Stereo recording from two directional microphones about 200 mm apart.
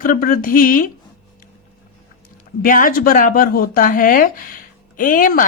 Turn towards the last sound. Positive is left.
turn(degrees=45)  # may be behind; listen again after turning